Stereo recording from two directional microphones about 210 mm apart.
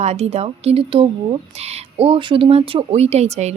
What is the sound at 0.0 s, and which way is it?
Speech, 30° right (ahead or behind).